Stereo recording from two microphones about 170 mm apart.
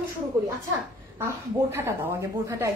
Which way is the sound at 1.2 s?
15° right (ahead or behind).